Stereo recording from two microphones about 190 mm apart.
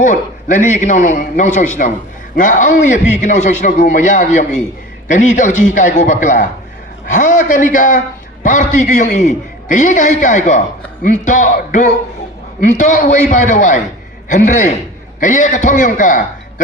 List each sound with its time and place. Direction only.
0.0 s a man's voice: 40° left (ahead or behind)